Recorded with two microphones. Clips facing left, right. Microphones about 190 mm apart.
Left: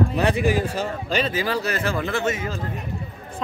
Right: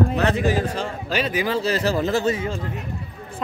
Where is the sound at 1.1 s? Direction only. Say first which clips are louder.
Right 2 dB; 10° right (ahead or behind); by 2.6 s 30° right (ahead or behind).